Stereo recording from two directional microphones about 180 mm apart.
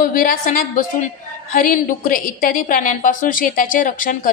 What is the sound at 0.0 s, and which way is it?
A woman's voice, 50° left (ahead or behind).